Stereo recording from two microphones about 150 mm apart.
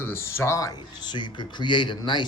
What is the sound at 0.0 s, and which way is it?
Speech, 15° left (ahead or behind).